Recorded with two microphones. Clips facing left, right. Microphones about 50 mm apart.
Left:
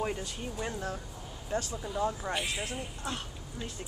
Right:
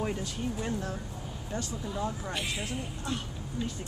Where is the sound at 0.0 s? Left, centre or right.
Centre.